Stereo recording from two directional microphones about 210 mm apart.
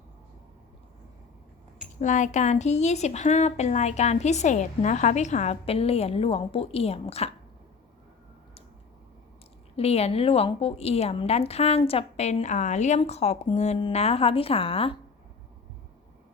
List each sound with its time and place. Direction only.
2.0 s a woman's voice: 35° left (ahead or behind)
9.7 s a woman's voice: 30° left (ahead or behind)